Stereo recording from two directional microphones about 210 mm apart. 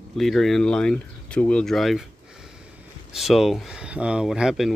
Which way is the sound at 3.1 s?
Centre (ahead or behind).